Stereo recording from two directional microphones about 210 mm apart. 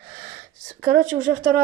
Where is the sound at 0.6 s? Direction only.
40° right (ahead or behind).